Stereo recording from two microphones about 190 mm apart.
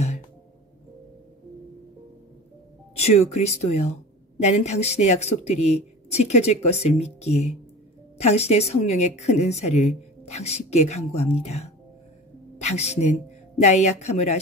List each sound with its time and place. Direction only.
3.1 s a woman's voice: 35° left (ahead or behind)